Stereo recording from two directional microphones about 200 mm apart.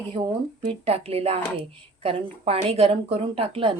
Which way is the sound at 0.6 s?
25° right (ahead or behind).